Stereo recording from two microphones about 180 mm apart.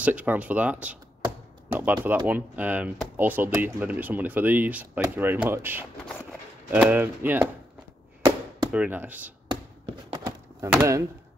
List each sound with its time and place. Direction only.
0.0 s speech: 10° right (ahead or behind)
8.7 s speech: 10° right (ahead or behind)
10.1 s a sound: 20° right (ahead or behind)